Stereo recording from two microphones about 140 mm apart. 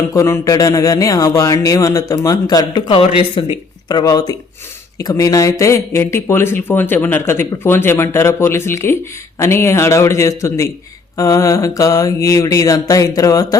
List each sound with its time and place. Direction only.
0.1 s speech: 20° left (ahead or behind); by 3.5 s 40° left (ahead or behind)
3.8 s speech: 30° left (ahead or behind)